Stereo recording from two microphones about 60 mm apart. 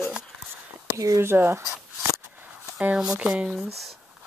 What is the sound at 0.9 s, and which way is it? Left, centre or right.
Speech, right.